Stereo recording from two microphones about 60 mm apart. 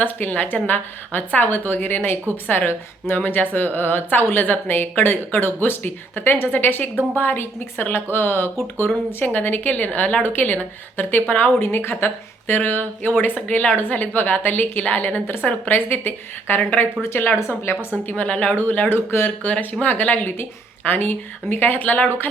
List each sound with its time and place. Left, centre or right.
0.0 s a woman's voice: left
13.5 s a woman's voice: left
17.0 s a woman's voice: left
18.1 s a woman's voice: centre; by 19.5 s left
19.8 s a woman's voice: left